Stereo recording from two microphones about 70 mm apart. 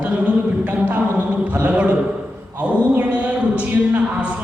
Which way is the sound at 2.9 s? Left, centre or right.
Right.